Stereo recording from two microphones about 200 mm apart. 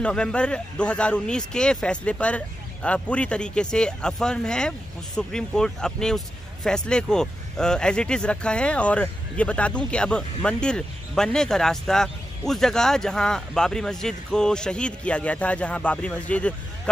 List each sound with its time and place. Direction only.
0.0 s a man's voice: 5° left (ahead or behind)